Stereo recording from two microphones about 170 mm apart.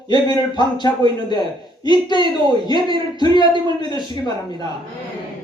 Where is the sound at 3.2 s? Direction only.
30° right (ahead or behind).